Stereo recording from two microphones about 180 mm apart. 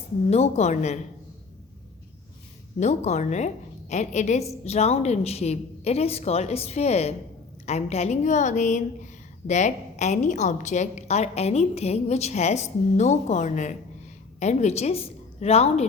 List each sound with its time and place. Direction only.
0.3 s a woman's voice: 35° left (ahead or behind)
2.8 s a woman's voice: 40° left (ahead or behind)